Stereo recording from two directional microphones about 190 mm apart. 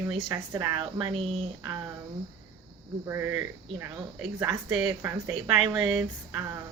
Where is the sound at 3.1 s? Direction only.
10° right (ahead or behind).